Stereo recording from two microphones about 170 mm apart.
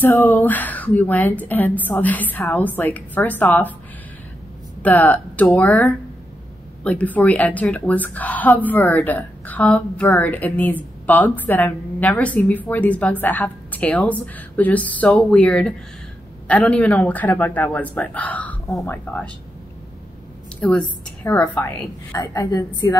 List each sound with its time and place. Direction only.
0.0 s a woman's voice: 10° left (ahead or behind)
4.8 s a woman's voice: 10° left (ahead or behind)
20.6 s a woman's voice: 10° left (ahead or behind)